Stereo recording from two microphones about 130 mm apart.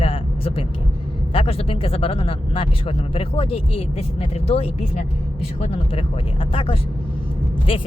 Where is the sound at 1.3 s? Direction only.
45° left (ahead or behind).